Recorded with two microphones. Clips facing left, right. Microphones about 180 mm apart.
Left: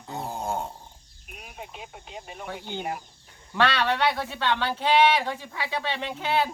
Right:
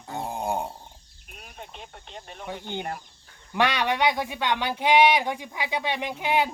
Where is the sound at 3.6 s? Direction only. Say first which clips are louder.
Even; 15° right (ahead or behind).